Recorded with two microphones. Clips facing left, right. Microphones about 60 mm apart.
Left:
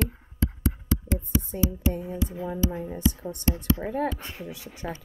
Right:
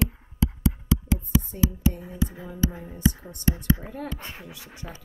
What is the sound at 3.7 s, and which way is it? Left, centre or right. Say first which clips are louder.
Speech: left 8 dB; left.